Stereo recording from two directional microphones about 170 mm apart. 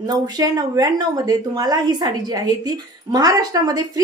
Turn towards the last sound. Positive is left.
turn(degrees=-20)  # may be behind; listen again after turning